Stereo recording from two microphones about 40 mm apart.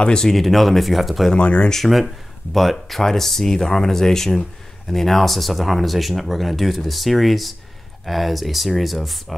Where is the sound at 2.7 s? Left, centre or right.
Centre.